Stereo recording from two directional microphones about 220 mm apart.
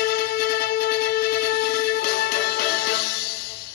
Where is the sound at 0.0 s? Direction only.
45° left (ahead or behind).